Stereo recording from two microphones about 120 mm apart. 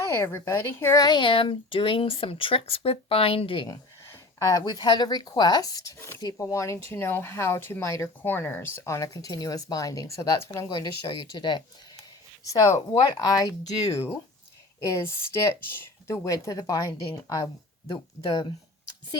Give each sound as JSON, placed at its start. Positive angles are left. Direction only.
{"t": 0.0, "sound": "speech", "side_deg": 20}
{"t": 1.0, "sound": "speech", "side_deg": 40}
{"t": 3.7, "sound": "speech", "side_deg": 30}
{"t": 12.5, "sound": "speech", "side_deg": 25}